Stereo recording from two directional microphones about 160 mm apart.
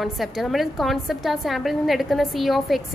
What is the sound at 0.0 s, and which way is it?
A woman's voice, centre (ahead or behind).